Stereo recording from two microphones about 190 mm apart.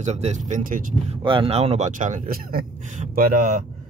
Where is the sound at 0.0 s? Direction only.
35° right (ahead or behind).